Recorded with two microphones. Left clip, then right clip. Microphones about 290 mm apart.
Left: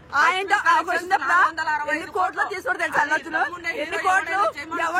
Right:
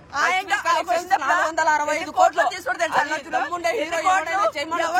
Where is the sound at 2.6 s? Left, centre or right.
Centre.